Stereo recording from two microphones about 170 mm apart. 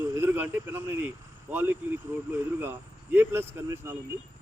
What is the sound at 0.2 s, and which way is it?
Speech, 10° right (ahead or behind).